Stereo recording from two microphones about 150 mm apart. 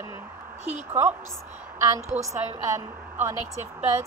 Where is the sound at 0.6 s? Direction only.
10° right (ahead or behind).